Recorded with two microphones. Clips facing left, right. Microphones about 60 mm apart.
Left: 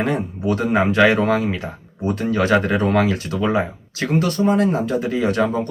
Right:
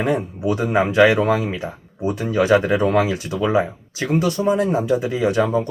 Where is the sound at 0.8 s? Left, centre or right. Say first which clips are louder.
Right 2 dB; left.